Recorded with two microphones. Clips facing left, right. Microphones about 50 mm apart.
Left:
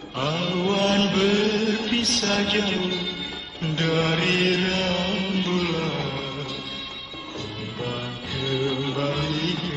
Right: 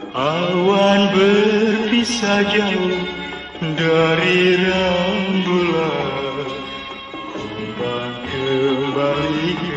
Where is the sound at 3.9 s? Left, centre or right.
Right.